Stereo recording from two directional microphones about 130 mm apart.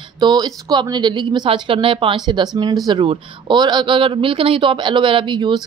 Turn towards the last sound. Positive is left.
turn(degrees=-35)  # may be behind; listen again after turning